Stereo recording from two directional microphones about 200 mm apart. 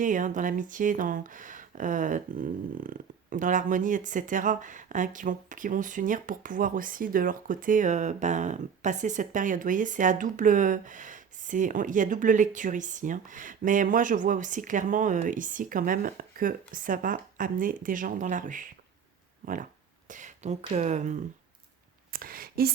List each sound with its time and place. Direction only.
0.0 s speech: 40° right (ahead or behind)
20.1 s speech: 40° right (ahead or behind)